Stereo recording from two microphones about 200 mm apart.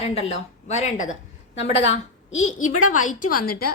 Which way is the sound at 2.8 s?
90° left.